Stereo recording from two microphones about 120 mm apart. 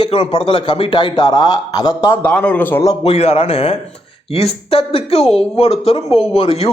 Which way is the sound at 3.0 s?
60° left (ahead or behind).